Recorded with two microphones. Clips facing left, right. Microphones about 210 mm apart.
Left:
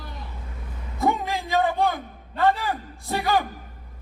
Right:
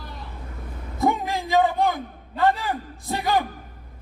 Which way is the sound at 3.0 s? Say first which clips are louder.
Left 1 dB; 15° right (ahead or behind).